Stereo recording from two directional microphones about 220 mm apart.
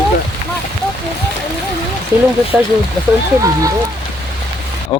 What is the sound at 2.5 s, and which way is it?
Speech, 5° right (ahead or behind).